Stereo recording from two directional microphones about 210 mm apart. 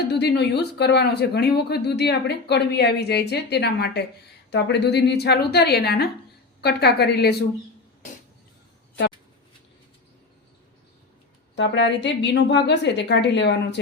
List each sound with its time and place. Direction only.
0.1 s speech: 55° left (ahead or behind)
11.5 s a woman's voice: 55° left (ahead or behind)